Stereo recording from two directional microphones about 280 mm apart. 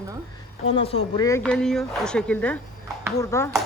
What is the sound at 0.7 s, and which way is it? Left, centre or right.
Speech, left.